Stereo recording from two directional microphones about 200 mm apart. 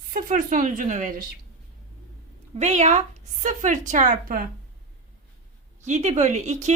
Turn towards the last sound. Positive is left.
turn(degrees=-35)  # may be behind; listen again after turning